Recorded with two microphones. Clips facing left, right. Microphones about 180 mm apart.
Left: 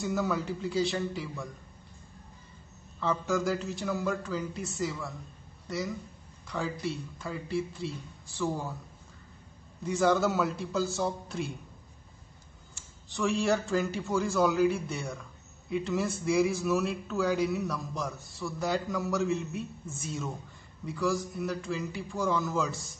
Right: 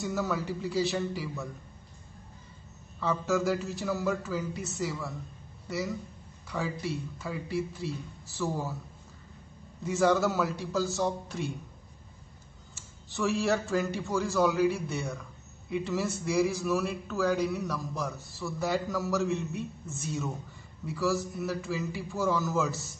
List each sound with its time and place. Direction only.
0.0 s a man's voice: centre (ahead or behind)
3.0 s a man's voice: centre (ahead or behind)
9.8 s a man's voice: centre (ahead or behind)
12.7 s a man's voice: centre (ahead or behind)